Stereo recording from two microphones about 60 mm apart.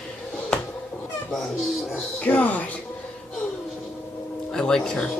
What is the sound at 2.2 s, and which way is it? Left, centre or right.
Speech, left.